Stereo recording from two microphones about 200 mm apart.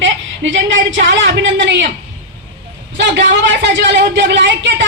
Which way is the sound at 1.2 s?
65° right (ahead or behind).